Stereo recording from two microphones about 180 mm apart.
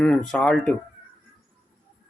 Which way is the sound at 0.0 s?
5° left (ahead or behind).